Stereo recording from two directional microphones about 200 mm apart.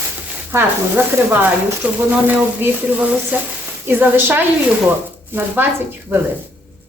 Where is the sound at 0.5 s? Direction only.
10° right (ahead or behind).